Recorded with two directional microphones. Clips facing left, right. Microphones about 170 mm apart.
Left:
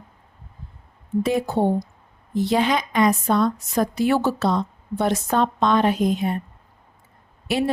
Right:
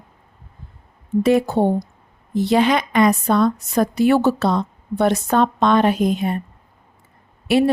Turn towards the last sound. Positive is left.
turn(degrees=-65)  # may be behind; listen again after turning